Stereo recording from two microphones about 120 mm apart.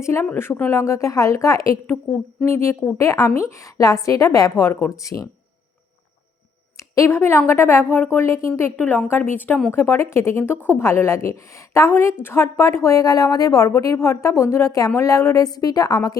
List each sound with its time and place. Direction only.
0.0 s speech: 25° left (ahead or behind)
6.7 s speech: 25° left (ahead or behind)